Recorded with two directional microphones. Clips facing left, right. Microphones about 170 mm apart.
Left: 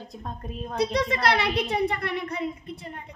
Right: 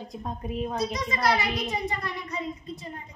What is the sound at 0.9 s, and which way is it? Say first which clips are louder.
A child's voice: left 4 dB; 65° left (ahead or behind).